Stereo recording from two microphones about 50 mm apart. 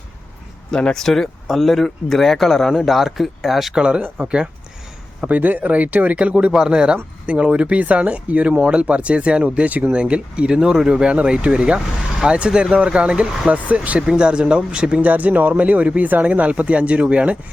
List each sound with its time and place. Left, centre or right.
0.7 s speech: centre
0.9 s speech: centre
3.8 s speech: centre
5.3 s speech: right
14.0 s speech: centre
15.0 s speech: right